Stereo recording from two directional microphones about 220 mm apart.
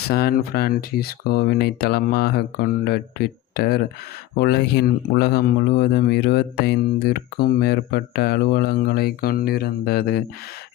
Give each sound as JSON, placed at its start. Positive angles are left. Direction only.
{"t": 0.1, "sound": "speech", "side_deg": 45}